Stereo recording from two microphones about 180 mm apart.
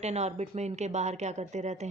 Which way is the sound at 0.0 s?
35° right (ahead or behind).